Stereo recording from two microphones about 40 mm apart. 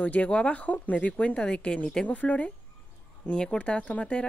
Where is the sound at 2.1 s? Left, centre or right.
Left.